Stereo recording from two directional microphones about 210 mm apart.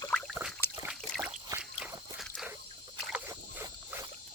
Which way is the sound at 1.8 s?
5° right (ahead or behind).